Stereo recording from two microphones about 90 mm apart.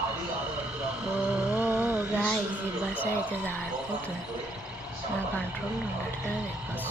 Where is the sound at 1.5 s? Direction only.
25° right (ahead or behind).